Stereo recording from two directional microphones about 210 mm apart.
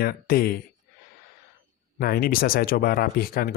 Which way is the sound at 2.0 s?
45° left (ahead or behind).